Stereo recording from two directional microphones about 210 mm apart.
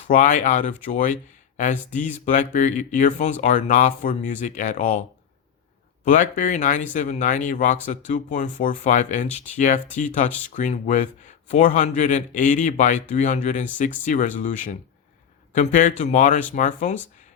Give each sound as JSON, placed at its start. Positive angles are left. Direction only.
{"t": 0.1, "sound": "speech", "side_deg": 40}
{"t": 6.1, "sound": "speech", "side_deg": 35}